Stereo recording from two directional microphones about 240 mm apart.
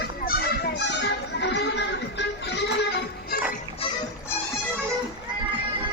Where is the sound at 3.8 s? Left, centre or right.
Left.